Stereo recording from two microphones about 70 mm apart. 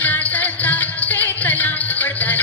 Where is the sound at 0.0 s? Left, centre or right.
Left.